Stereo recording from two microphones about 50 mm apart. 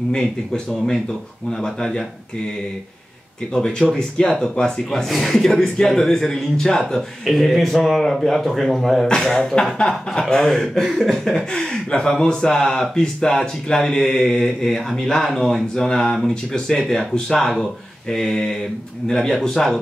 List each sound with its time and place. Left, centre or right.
0.1 s speech: centre
3.9 s speech: centre
5.1 s speech: centre
9.3 s speech: centre